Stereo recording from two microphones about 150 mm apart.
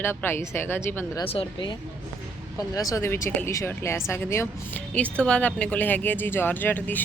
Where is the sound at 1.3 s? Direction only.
35° left (ahead or behind).